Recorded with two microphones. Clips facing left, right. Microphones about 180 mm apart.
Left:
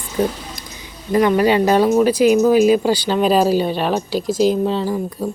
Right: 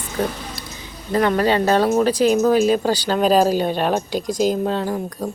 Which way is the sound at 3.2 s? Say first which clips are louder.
Even; 40° right (ahead or behind).